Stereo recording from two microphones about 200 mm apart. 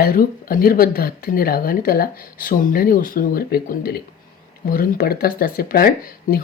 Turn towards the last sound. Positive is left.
turn(degrees=45)  # may be behind; listen again after turning